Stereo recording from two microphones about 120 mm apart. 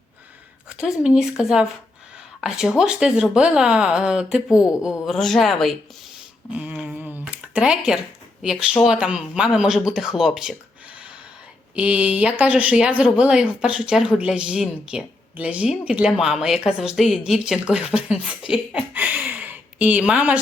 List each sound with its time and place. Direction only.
0.7 s speech: 5° right (ahead or behind)
6.5 s a sound: 10° right (ahead or behind)
8.8 s speech: 5° right (ahead or behind)
11.7 s speech: 10° right (ahead or behind)